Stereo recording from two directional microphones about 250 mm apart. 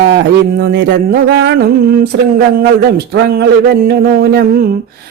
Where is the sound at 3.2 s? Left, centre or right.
Right.